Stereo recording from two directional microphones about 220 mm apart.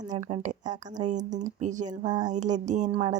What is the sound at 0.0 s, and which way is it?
Speech, 35° right (ahead or behind).